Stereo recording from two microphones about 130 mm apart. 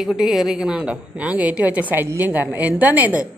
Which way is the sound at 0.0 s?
Centre (ahead or behind).